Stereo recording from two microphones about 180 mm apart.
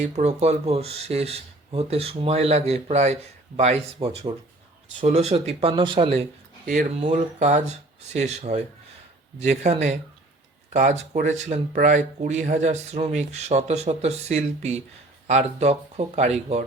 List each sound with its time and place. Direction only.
0.2 s speech: 35° right (ahead or behind)